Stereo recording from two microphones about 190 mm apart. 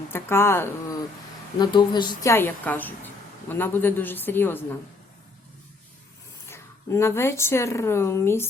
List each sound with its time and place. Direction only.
0.1 s a woman's voice: 15° left (ahead or behind)
1.5 s a woman's voice: 25° left (ahead or behind)
6.5 s a woman's voice: 15° left (ahead or behind)